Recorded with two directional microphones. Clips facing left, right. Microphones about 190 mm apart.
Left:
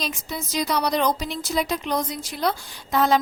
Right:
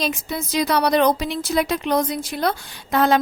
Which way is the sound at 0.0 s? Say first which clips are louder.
Right 5 dB; 60° right (ahead or behind).